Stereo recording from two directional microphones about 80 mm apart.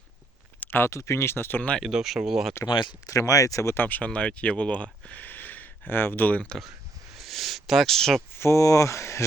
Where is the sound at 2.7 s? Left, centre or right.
Left.